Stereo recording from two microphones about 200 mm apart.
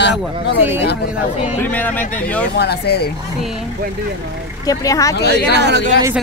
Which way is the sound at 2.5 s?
55° left (ahead or behind).